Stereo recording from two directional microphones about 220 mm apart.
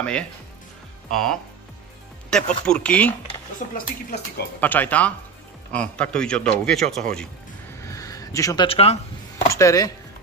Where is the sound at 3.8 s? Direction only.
45° left (ahead or behind).